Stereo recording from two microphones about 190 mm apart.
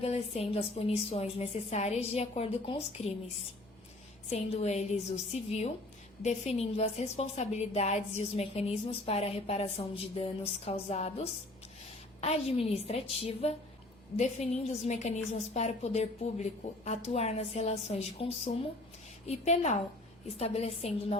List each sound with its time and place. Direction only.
0.0 s a woman's voice: 30° left (ahead or behind)
4.3 s a woman's voice: 35° left (ahead or behind)